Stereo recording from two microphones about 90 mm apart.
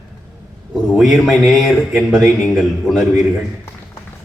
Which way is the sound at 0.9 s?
Centre (ahead or behind).